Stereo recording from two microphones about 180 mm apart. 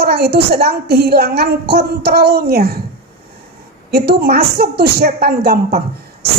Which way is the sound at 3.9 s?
60° right (ahead or behind).